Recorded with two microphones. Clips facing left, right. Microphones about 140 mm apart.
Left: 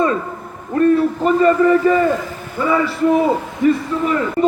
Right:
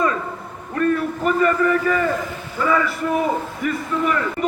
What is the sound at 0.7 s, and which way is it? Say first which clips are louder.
A man's voice: left 6 dB; 30° left (ahead or behind).